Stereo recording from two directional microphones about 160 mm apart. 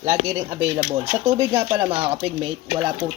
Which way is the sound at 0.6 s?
20° right (ahead or behind).